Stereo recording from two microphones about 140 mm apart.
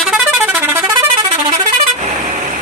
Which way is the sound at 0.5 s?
15° right (ahead or behind).